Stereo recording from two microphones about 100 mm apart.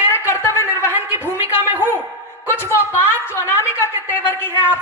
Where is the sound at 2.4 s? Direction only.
25° left (ahead or behind).